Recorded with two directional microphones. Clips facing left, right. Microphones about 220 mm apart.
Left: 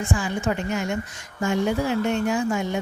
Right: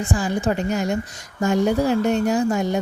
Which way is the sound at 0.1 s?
35° right (ahead or behind).